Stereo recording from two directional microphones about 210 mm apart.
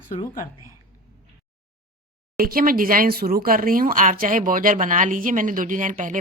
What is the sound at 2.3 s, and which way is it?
Speech, 45° right (ahead or behind).